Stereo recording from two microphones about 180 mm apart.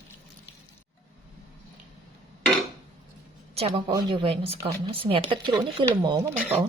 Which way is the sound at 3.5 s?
30° right (ahead or behind).